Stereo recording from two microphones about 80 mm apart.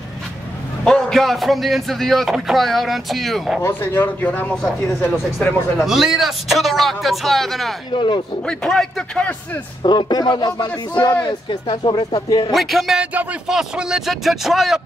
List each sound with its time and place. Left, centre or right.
0.8 s speech: centre
3.6 s a man's voice: left
5.9 s speech: centre
7.9 s speech: left
8.5 s speech: centre
9.8 s a man's voice: left
11.2 s speech: left
12.4 s speech: centre
13.0 s speech: centre
13.5 s speech: centre